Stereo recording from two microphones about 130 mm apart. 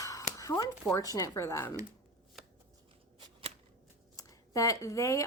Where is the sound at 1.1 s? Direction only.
25° left (ahead or behind).